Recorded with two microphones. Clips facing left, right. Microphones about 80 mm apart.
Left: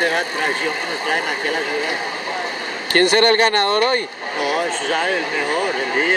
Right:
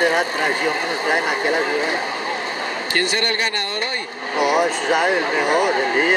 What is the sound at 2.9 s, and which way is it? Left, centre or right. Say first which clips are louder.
Speech: left 9 dB; left.